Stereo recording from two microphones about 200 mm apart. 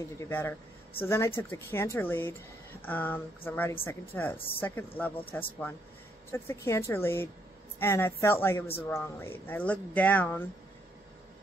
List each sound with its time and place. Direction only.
0.2 s speech: 10° left (ahead or behind)